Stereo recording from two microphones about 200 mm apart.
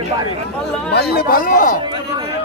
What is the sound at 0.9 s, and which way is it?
Speech, 50° left (ahead or behind).